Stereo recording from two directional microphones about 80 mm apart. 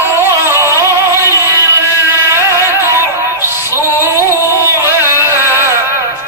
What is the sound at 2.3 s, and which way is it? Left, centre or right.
Music, right.